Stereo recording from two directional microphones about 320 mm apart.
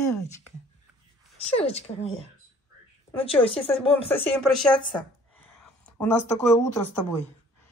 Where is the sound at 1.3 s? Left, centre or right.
Centre.